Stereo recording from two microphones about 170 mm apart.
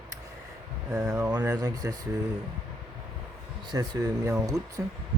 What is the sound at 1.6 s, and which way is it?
Speech, 20° right (ahead or behind).